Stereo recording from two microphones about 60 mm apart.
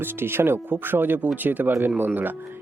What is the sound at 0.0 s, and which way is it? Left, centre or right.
Speech, right.